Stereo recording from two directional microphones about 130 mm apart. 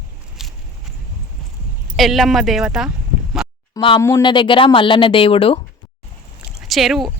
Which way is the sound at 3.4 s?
5° right (ahead or behind).